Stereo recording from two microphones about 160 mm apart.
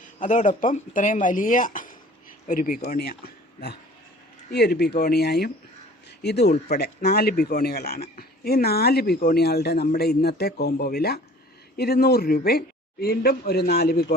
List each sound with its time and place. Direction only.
0.0 s speech: 55° left (ahead or behind); by 14.0 s 75° left (ahead or behind)